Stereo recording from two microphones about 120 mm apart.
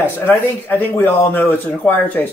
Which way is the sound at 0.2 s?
15° left (ahead or behind).